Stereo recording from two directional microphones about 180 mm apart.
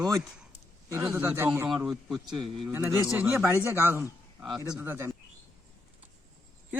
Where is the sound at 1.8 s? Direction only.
Centre (ahead or behind).